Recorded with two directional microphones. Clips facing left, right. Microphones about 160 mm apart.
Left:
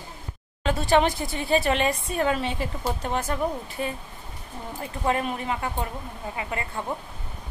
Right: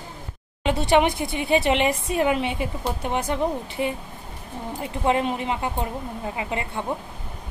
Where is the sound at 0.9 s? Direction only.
15° right (ahead or behind).